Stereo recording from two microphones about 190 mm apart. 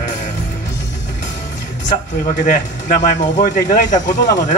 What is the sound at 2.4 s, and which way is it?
Speech, 40° left (ahead or behind).